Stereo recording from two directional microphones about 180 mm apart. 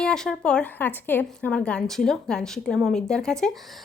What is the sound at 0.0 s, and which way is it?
Speech, 5° left (ahead or behind).